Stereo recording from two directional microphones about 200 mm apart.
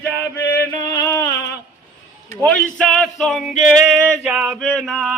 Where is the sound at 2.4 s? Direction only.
5° left (ahead or behind).